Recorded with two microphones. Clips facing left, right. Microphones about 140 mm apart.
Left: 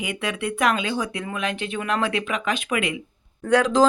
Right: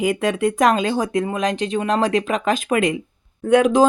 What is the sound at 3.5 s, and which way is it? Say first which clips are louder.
Speech: right 4 dB; 20° right (ahead or behind).